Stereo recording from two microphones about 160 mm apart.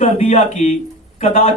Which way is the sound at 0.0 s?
45° left (ahead or behind).